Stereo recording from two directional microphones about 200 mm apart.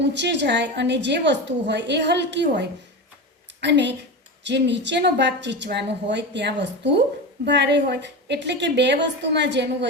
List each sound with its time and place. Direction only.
0.0 s a woman's voice: 60° right (ahead or behind)